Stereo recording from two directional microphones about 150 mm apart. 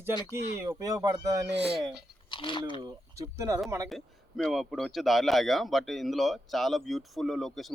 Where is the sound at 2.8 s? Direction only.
25° right (ahead or behind).